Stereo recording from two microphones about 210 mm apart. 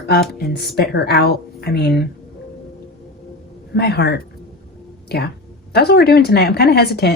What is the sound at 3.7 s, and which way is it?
A woman's voice, 50° left (ahead or behind).